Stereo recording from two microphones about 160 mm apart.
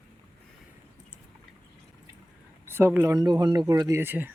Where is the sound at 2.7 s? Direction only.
15° right (ahead or behind).